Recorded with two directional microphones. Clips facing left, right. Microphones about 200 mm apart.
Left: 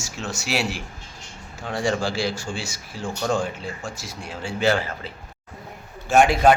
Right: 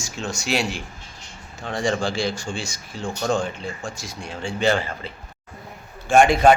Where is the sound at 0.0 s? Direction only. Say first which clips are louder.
Right 2 dB; 5° left (ahead or behind).